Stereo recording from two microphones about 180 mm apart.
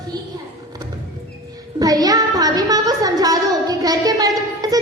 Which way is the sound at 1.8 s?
20° right (ahead or behind).